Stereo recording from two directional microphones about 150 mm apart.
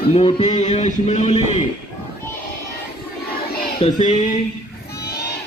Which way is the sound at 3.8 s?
40° left (ahead or behind).